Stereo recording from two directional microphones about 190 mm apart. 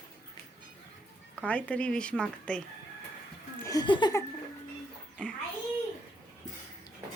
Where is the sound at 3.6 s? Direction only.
20° left (ahead or behind).